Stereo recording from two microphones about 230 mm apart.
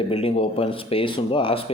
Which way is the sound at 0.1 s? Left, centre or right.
Left.